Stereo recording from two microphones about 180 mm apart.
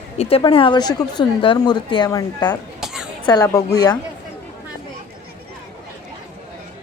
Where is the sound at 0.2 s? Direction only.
30° left (ahead or behind).